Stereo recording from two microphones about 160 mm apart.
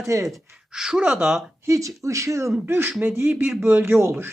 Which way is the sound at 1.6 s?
20° right (ahead or behind).